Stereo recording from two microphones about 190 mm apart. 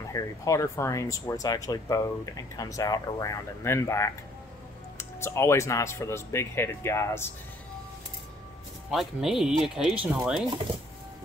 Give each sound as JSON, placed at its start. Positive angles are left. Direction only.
{"t": 0.1, "sound": "speech", "side_deg": 15}
{"t": 8.9, "sound": "speech", "side_deg": 0}